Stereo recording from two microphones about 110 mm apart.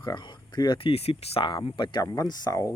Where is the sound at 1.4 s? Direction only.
45° left (ahead or behind).